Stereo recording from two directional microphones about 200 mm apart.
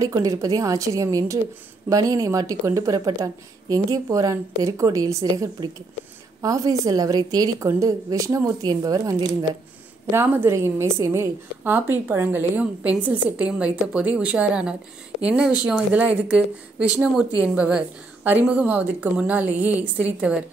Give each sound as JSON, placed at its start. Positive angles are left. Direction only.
{"t": 0.0, "sound": "a woman's voice", "side_deg": -15}